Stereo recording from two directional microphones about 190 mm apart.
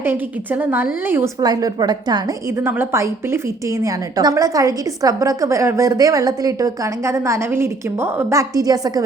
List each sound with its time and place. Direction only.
0.0 s a woman's voice: 10° right (ahead or behind)